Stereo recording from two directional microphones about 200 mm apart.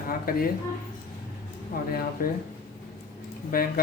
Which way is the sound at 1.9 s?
45° left (ahead or behind).